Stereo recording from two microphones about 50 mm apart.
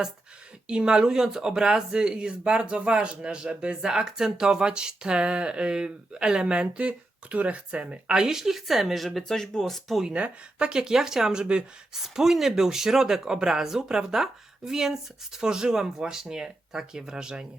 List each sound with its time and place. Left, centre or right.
0.7 s speech: centre
10.1 s speech: right
11.9 s speech: centre